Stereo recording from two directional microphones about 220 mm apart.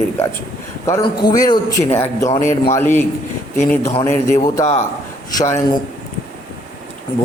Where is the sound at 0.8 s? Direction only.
15° left (ahead or behind).